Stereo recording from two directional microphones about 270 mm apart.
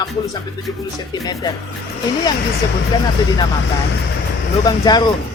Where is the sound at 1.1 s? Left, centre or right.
Centre.